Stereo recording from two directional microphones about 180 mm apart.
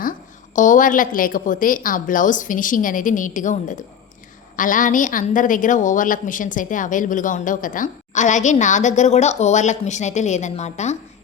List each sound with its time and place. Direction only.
0.5 s a woman's voice: 45° left (ahead or behind)